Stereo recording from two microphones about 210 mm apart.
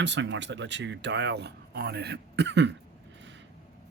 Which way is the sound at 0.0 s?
60° right (ahead or behind).